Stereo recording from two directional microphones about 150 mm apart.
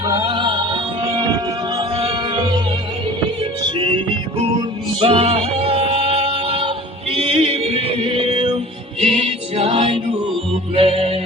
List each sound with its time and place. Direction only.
0.0 s music: 30° right (ahead or behind)
3.8 s music: 35° right (ahead or behind)